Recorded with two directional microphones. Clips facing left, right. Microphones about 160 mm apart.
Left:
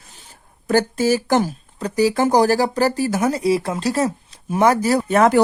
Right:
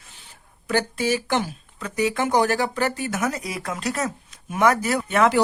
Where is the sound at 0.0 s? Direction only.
40° left (ahead or behind).